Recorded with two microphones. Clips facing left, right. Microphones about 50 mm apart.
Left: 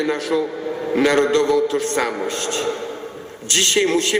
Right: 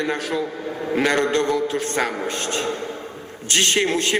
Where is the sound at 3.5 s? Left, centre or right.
Right.